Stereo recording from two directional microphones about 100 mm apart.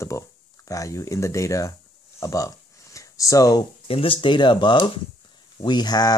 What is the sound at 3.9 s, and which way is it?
Speech, 65° left (ahead or behind).